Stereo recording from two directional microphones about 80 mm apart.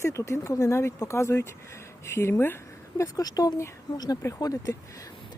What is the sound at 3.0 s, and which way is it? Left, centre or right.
Speech, left.